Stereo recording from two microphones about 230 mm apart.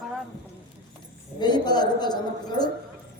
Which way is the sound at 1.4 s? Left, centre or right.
Centre.